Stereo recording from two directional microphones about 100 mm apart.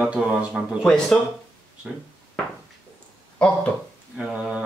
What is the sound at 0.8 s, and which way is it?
Speech, 5° left (ahead or behind).